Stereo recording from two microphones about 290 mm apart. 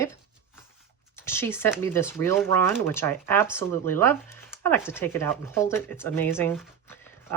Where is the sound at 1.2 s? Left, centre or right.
Centre.